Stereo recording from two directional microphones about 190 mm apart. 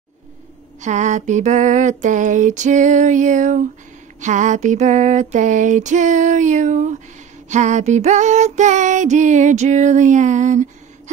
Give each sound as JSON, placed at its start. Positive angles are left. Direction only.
{"t": 0.7, "sound": "female singing", "side_deg": -40}